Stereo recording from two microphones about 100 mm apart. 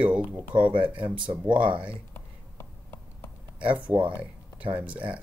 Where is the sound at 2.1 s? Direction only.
25° left (ahead or behind).